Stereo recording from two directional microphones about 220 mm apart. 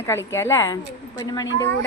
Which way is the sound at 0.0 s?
10° left (ahead or behind).